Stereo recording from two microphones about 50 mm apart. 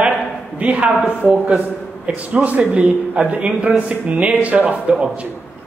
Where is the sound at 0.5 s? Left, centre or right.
Right.